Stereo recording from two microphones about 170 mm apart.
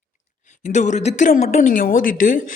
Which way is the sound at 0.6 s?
45° left (ahead or behind).